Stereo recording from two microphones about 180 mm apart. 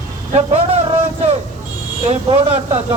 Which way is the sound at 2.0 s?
35° right (ahead or behind).